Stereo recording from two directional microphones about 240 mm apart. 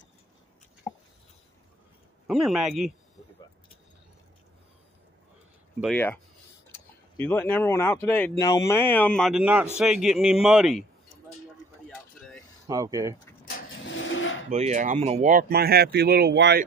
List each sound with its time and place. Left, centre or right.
2.2 s a man's voice: centre
5.8 s a man's voice: centre
7.2 s a man's voice: centre
12.6 s speech: centre
14.0 s a sound: left
14.5 s speech: right